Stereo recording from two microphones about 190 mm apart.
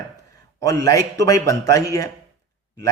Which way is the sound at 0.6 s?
20° left (ahead or behind).